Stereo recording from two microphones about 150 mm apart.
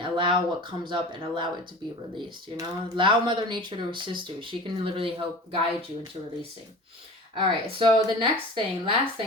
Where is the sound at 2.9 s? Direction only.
35° right (ahead or behind).